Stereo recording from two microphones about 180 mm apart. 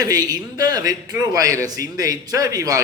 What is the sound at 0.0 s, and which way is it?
Speech, 20° right (ahead or behind).